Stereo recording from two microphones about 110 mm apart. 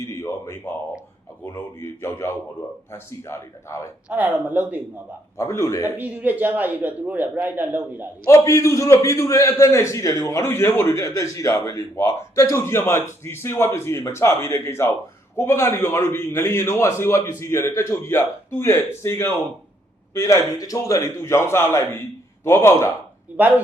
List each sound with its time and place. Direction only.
0.0 s a sound: 30° left (ahead or behind)
1.5 s a man's voice: 20° left (ahead or behind)
4.1 s a man's voice: 15° right (ahead or behind)
5.4 s a man's voice: 25° left (ahead or behind)
6.0 s a man's voice: 15° right (ahead or behind)
8.3 s a man's voice: 25° left (ahead or behind)